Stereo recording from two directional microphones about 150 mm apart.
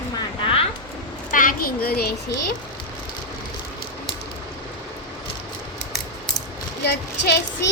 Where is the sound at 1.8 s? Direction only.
90° left.